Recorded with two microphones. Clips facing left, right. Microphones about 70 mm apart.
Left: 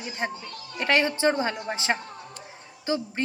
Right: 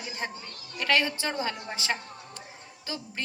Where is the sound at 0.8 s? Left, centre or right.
Left.